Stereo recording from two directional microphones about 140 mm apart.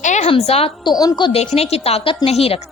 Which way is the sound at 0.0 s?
55° left (ahead or behind).